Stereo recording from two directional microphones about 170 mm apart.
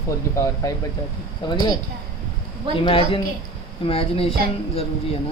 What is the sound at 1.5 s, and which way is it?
Speech, 25° left (ahead or behind).